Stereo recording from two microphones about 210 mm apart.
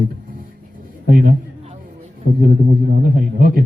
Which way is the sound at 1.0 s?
40° right (ahead or behind).